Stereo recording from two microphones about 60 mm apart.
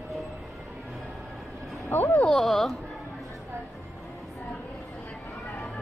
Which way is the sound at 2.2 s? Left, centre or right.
Centre.